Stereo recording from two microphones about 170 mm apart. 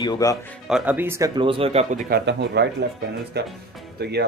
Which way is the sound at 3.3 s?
75° right (ahead or behind).